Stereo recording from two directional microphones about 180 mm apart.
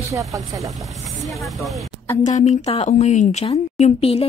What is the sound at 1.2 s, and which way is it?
Speech, centre (ahead or behind).